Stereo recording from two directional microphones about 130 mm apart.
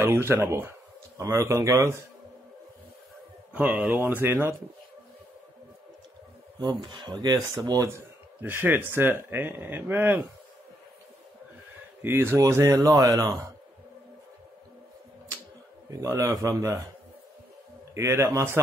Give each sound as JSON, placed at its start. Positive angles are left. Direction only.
{"t": 0.0, "sound": "speech", "side_deg": -20}
{"t": 3.5, "sound": "speech", "side_deg": -10}
{"t": 6.6, "sound": "speech", "side_deg": -35}
{"t": 8.4, "sound": "speech", "side_deg": -15}
{"t": 12.0, "sound": "speech", "side_deg": -15}
{"t": 15.9, "sound": "speech", "side_deg": -25}
{"t": 17.9, "sound": "speech", "side_deg": -20}